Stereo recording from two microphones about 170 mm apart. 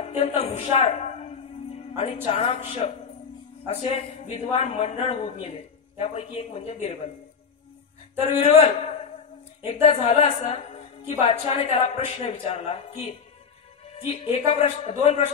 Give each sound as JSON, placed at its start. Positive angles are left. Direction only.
{"t": 0.0, "sound": "music", "side_deg": 35}
{"t": 2.8, "sound": "a man's voice", "side_deg": 40}
{"t": 8.3, "sound": "a man's voice", "side_deg": 40}